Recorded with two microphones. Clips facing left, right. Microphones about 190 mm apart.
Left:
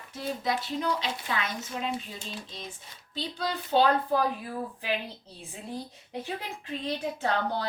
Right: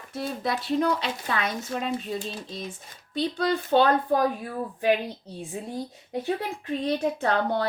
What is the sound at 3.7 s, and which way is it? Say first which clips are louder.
Speech: right 3 dB; 70° right (ahead or behind).